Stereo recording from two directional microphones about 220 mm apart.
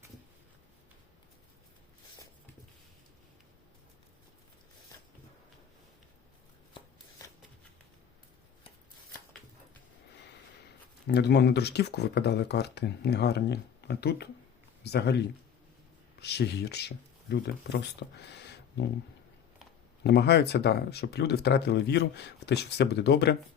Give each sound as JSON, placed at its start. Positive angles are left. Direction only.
{"t": 11.0, "sound": "speech", "side_deg": 50}
{"t": 20.1, "sound": "speech", "side_deg": 50}